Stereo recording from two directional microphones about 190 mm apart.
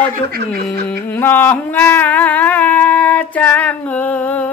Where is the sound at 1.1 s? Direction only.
10° left (ahead or behind).